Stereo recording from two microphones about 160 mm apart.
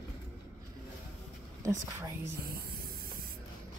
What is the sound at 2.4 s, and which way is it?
Spray, 70° right (ahead or behind).